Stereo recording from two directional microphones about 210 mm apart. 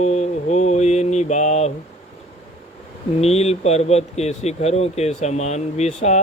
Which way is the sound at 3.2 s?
30° left (ahead or behind).